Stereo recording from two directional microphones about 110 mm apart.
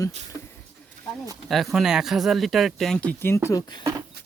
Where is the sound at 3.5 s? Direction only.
40° left (ahead or behind).